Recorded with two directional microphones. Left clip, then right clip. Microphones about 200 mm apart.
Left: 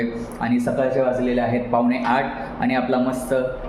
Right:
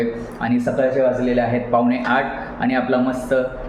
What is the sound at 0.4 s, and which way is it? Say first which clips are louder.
Speech: right 2 dB; 25° left (ahead or behind).